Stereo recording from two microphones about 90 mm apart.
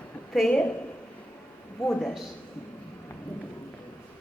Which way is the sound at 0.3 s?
10° left (ahead or behind).